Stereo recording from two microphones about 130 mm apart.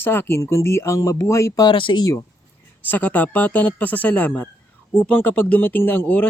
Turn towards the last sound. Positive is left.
turn(degrees=10)  # may be behind; listen again after turning